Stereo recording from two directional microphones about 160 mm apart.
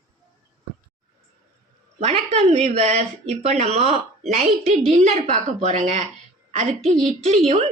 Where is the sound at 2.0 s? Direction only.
40° right (ahead or behind).